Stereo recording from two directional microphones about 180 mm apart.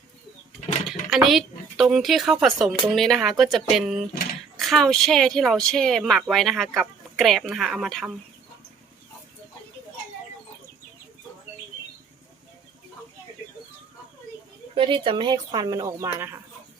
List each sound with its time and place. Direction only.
0.9 s speech: centre (ahead or behind)
14.8 s speech: 30° right (ahead or behind)